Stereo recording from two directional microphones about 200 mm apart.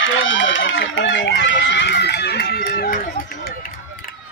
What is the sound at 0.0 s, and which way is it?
Run, 75° left (ahead or behind).